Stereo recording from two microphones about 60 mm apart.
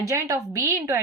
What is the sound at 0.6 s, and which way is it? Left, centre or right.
Speech, right.